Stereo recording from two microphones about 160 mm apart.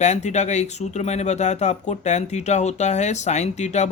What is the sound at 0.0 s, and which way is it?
Speech, 45° left (ahead or behind).